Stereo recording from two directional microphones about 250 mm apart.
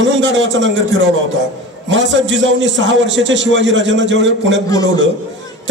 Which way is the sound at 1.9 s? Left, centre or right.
Right.